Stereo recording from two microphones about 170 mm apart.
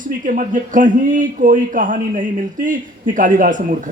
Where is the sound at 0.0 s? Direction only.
50° right (ahead or behind).